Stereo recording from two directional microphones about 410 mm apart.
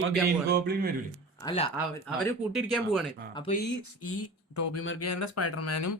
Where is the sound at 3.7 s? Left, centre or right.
Left.